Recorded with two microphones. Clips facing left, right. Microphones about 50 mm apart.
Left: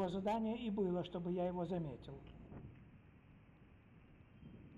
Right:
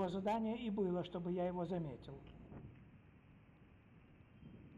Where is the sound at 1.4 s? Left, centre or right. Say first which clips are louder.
Even; right.